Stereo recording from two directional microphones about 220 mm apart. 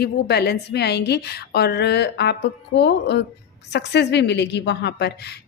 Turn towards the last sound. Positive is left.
turn(degrees=50)  # may be behind; listen again after turning